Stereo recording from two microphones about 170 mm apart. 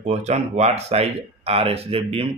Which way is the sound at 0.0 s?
40° right (ahead or behind).